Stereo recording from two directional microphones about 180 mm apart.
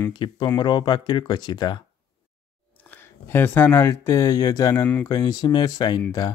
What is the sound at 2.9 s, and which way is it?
Speech, 10° left (ahead or behind).